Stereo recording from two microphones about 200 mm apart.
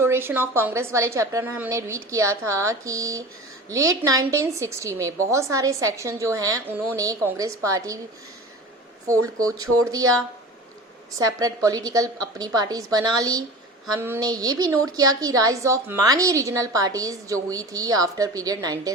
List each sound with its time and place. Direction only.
0.0 s a woman's voice: 10° right (ahead or behind)
9.0 s a woman's voice: 15° right (ahead or behind)
11.2 s a woman's voice: 20° right (ahead or behind)